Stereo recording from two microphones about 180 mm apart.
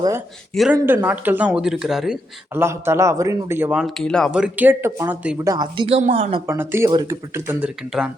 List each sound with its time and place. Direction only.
0.5 s speech: centre (ahead or behind)
0.8 s speech: 15° right (ahead or behind)
2.6 s speech: 15° right (ahead or behind)
5.5 s speech: 25° right (ahead or behind)
6.0 s a woman's voice: 40° right (ahead or behind)
6.5 s speech: 15° right (ahead or behind)